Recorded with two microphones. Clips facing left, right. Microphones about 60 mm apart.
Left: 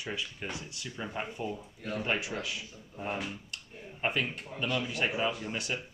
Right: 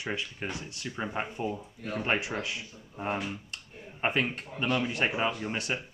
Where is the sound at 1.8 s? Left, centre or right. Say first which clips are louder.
Even; centre.